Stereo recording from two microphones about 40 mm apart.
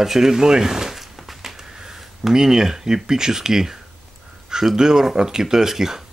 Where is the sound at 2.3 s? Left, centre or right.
Centre.